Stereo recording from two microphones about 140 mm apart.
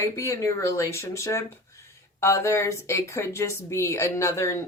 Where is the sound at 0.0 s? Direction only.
20° left (ahead or behind).